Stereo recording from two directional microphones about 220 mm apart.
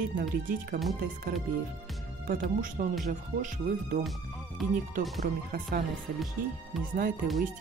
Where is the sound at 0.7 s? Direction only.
45° right (ahead or behind).